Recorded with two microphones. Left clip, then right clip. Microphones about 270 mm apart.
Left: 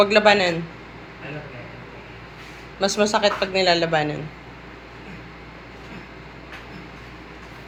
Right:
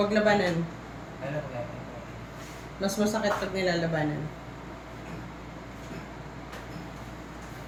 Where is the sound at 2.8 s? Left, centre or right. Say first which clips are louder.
Left 9 dB; centre.